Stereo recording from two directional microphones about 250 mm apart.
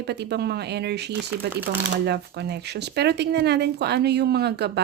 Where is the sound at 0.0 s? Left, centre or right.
Right.